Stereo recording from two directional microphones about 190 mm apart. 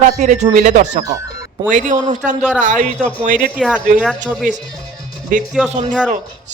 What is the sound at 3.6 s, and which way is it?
Speech, 5° left (ahead or behind).